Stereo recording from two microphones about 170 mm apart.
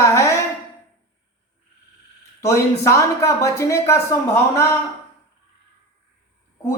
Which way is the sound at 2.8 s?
15° left (ahead or behind).